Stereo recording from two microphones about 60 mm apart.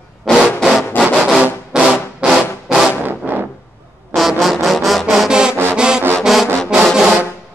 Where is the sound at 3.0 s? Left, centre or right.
Right.